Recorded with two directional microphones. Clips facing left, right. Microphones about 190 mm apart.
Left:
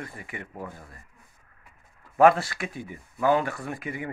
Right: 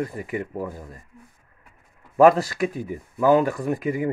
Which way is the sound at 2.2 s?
40° right (ahead or behind).